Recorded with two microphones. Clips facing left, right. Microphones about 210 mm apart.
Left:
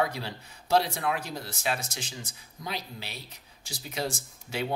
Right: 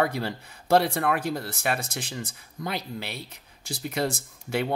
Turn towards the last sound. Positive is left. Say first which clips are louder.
# right 5 dB
turn(degrees=-55)  # may be behind; listen again after turning